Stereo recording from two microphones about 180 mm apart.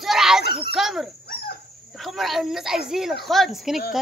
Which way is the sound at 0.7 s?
Centre (ahead or behind).